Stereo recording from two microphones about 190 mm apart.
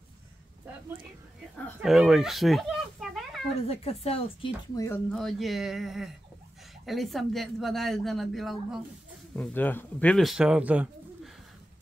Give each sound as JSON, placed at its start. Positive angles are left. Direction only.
{"t": 1.8, "sound": "a sound", "side_deg": -5}
{"t": 3.6, "sound": "speech", "side_deg": 30}
{"t": 4.7, "sound": "speech", "side_deg": 15}
{"t": 5.1, "sound": "speech", "side_deg": 0}